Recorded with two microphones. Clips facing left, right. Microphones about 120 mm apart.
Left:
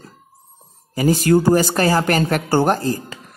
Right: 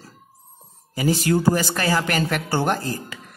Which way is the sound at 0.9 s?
45° left (ahead or behind).